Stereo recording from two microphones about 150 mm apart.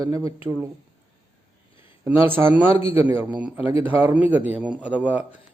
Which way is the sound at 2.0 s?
15° right (ahead or behind).